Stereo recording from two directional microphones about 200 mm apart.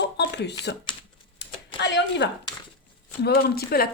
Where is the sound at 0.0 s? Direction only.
60° left (ahead or behind).